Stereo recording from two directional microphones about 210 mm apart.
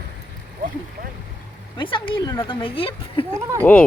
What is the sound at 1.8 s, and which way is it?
A woman's voice, 25° left (ahead or behind).